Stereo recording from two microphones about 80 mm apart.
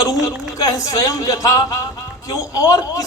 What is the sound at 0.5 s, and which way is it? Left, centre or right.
A man's voice, left.